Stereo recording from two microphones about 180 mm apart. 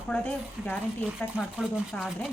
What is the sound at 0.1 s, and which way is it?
A woman's voice, 5° left (ahead or behind).